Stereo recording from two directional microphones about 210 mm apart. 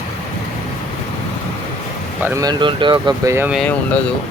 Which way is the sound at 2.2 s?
15° right (ahead or behind).